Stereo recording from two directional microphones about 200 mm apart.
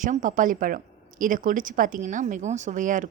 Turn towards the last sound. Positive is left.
turn(degrees=-40)  # may be behind; listen again after turning